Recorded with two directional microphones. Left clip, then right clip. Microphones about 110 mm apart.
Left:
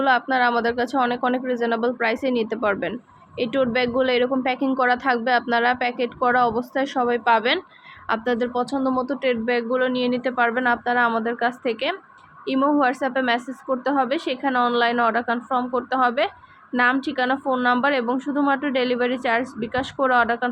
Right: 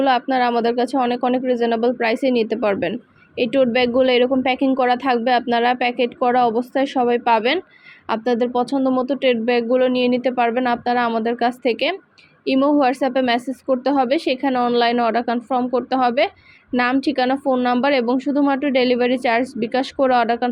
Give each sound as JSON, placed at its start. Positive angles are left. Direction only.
{"t": 0.0, "sound": "speech", "side_deg": -35}